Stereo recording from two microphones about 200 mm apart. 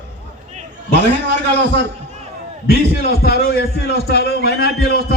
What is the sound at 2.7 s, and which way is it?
A man's voice, 50° left (ahead or behind).